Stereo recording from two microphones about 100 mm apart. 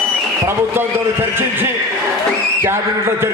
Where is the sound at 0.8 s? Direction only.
25° right (ahead or behind).